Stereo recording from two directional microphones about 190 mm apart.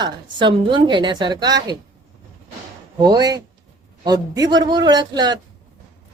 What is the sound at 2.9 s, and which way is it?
Speech, 20° right (ahead or behind).